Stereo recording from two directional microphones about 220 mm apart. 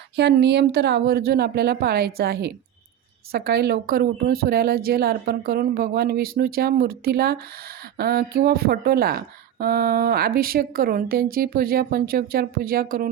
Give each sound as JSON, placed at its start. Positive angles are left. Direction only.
{"t": 0.2, "sound": "speech", "side_deg": -50}